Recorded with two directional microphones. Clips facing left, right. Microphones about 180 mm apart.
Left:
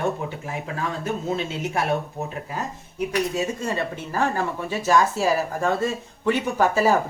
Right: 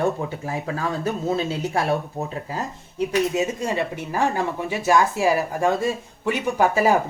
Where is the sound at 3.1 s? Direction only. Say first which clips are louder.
Right 3 dB; 20° right (ahead or behind).